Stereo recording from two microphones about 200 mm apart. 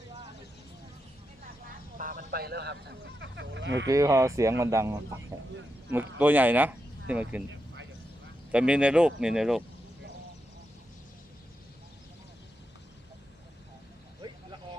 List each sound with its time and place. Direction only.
2.0 s speech: 45° right (ahead or behind); by 3.8 s 65° right (ahead or behind)
3.8 s speech: 15° right (ahead or behind)
8.5 s speech: 5° right (ahead or behind)